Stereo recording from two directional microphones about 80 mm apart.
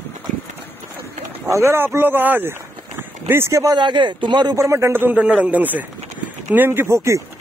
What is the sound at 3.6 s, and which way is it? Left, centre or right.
Speech, right.